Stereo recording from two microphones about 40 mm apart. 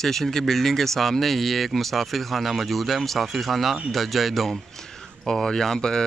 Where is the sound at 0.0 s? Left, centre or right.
Centre.